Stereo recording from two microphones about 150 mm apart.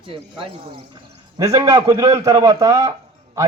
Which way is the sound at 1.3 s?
25° right (ahead or behind).